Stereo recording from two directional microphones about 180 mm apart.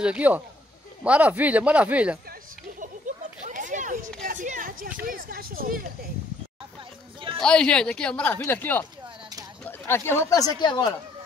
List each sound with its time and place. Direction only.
0.0 s speech: 5° right (ahead or behind)
3.1 s a sound: 45° right (ahead or behind)
5.0 s speech: 55° right (ahead or behind)
7.3 s speech: 5° left (ahead or behind); by 11.0 s 25° left (ahead or behind)